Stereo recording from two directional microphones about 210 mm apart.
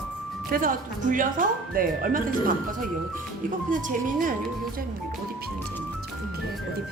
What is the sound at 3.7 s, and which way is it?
Speech, 40° right (ahead or behind).